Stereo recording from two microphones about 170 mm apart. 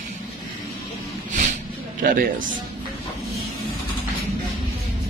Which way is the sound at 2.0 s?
55° right (ahead or behind).